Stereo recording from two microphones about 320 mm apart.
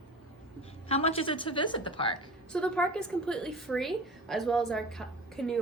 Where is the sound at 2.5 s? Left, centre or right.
Centre.